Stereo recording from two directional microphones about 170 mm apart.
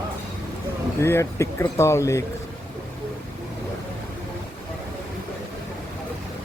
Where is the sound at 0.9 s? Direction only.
15° left (ahead or behind).